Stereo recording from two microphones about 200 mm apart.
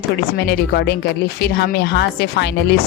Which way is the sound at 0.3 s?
55° left (ahead or behind).